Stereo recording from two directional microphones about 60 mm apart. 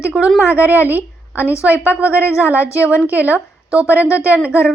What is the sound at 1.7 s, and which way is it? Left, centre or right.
Speech, left.